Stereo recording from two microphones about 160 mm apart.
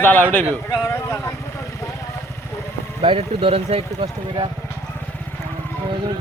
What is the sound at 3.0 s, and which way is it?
Speech, 35° right (ahead or behind).